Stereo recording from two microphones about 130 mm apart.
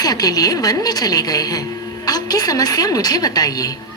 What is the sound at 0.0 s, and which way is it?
A woman's voice, 30° left (ahead or behind).